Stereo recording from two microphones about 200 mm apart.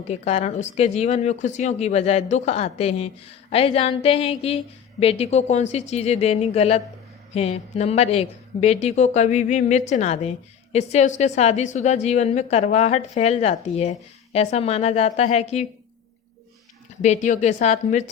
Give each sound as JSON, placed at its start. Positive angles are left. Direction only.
{"t": 0.0, "sound": "a woman's voice", "side_deg": 30}
{"t": 17.0, "sound": "a woman's voice", "side_deg": 40}